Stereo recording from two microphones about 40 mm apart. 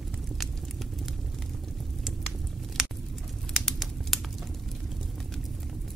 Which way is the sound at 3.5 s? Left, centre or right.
Centre.